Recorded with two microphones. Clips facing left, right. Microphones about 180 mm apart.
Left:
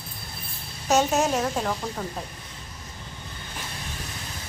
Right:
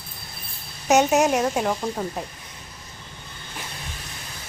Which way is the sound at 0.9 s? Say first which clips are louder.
Right 4 dB; 20° right (ahead or behind).